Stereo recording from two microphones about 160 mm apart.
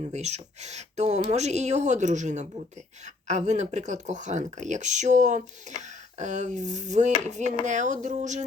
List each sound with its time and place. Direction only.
0.1 s speech: 45° right (ahead or behind)